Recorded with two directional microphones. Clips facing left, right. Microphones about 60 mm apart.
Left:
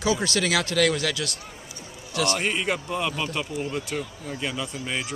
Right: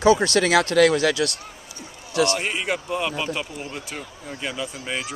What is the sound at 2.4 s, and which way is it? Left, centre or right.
Speech, centre.